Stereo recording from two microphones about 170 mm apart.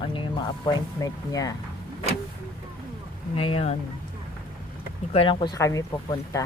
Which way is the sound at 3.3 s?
30° left (ahead or behind).